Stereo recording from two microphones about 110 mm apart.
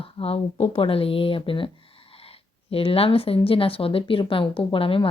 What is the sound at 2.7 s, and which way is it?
Speech, 60° left (ahead or behind).